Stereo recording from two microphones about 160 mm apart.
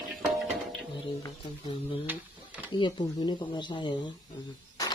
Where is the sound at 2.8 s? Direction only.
30° left (ahead or behind).